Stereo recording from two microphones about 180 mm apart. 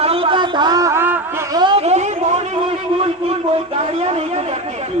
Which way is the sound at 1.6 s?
30° right (ahead or behind).